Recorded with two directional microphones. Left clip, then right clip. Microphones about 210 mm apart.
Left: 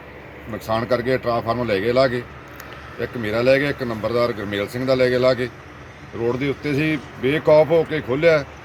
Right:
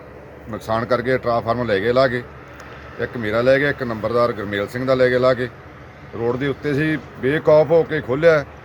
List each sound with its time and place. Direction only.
0.5 s speech: 10° right (ahead or behind)
6.7 s speech: centre (ahead or behind)